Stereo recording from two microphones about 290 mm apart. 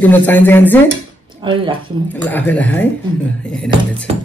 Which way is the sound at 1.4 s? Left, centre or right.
Centre.